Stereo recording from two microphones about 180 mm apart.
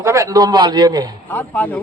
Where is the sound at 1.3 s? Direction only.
10° left (ahead or behind).